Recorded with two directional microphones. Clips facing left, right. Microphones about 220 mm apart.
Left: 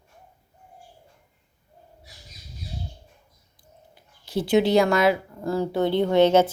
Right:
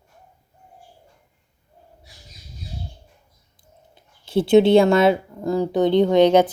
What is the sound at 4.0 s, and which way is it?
Speech, 25° right (ahead or behind).